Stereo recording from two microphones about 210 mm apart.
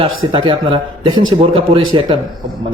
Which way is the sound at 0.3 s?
20° right (ahead or behind).